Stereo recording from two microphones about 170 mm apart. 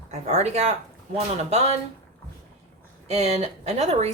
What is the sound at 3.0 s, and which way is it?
Speech, 40° right (ahead or behind).